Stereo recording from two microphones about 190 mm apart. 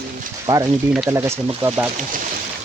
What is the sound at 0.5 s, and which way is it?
Speech, 15° right (ahead or behind).